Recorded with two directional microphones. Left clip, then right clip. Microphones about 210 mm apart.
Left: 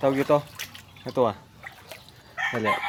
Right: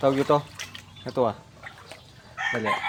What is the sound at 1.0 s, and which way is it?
Speech, 20° left (ahead or behind).